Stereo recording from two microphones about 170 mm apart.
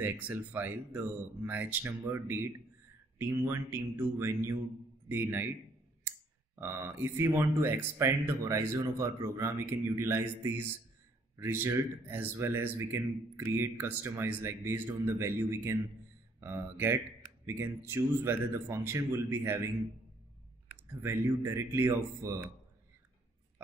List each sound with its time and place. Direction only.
0.0 s speech: 10° right (ahead or behind)
21.0 s speech: 15° right (ahead or behind)